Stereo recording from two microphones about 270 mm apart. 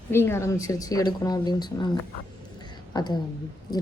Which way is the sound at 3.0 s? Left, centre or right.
Centre.